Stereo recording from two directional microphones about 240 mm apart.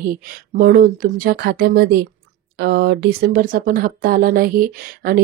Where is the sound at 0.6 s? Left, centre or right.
Right.